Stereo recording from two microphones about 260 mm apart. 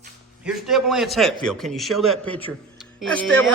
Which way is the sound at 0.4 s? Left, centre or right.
Centre.